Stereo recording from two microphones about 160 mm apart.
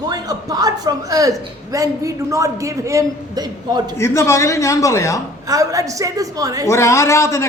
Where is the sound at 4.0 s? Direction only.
15° left (ahead or behind).